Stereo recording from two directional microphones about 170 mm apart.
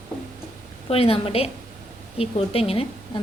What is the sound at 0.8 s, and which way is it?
A woman's voice, 35° left (ahead or behind).